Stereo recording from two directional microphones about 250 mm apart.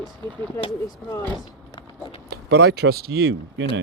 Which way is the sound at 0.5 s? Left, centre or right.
Centre.